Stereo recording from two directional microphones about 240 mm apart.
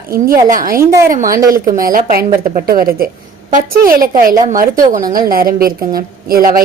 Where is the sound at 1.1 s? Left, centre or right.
Right.